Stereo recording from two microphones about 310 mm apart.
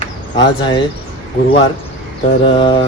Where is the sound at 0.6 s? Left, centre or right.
Centre.